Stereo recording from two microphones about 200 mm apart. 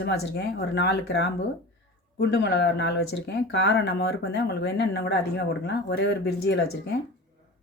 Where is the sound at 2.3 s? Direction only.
60° left (ahead or behind).